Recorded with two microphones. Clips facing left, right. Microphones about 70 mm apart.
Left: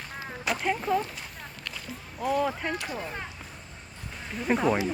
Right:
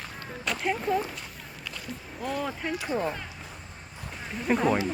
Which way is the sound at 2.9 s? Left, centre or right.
Right.